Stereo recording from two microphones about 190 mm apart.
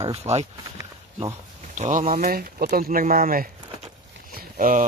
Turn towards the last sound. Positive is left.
turn(degrees=-45)  # may be behind; listen again after turning